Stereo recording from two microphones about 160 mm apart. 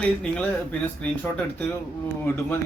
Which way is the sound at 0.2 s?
5° left (ahead or behind).